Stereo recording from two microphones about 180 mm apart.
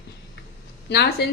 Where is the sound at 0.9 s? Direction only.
60° left (ahead or behind).